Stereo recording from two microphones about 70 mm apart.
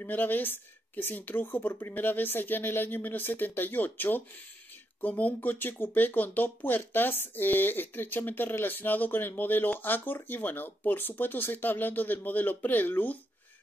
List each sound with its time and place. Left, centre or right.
0.0 s speech: left